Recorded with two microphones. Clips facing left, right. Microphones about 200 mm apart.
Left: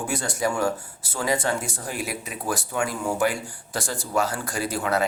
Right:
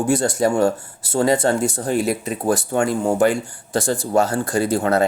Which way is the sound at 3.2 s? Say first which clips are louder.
Right 7 dB; 25° right (ahead or behind).